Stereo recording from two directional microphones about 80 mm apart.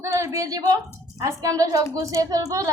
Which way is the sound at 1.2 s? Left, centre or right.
Right.